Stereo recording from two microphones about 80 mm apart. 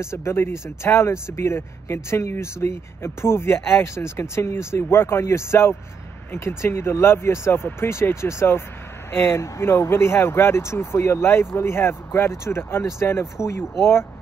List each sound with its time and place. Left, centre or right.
0.0 s speech: left